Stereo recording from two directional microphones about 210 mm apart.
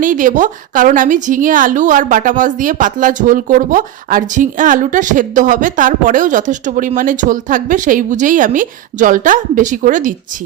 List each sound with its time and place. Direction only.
0.0 s a woman's voice: 40° right (ahead or behind)